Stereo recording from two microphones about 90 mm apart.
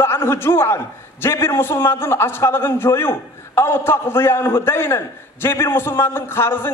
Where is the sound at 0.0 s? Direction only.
25° left (ahead or behind).